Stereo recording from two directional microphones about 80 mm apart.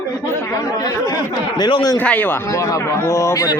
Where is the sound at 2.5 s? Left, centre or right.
Left.